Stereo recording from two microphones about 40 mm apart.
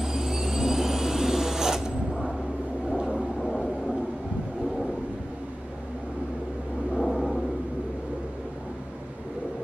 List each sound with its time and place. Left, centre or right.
0.0 s vehicle: centre
7.0 s vehicle: centre